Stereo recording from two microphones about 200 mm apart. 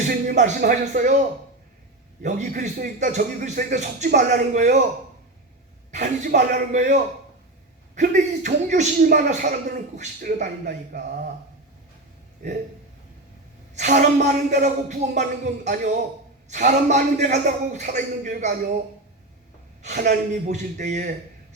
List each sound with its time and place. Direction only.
0.3 s a man's voice: 40° right (ahead or behind)
2.2 s a man's voice: 40° right (ahead or behind)
5.9 s a man's voice: 35° right (ahead or behind)
14.0 s a man's voice: 40° right (ahead or behind)
19.8 s a man's voice: 40° right (ahead or behind)